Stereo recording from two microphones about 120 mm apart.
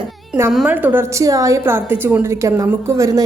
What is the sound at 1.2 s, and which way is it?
A woman's voice, 25° right (ahead or behind).